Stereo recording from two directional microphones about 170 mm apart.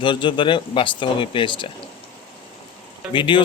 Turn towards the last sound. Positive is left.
turn(degrees=30)  # may be behind; listen again after turning